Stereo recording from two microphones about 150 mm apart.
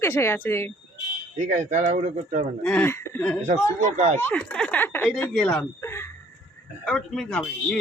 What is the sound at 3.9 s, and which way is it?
Speech, 50° right (ahead or behind).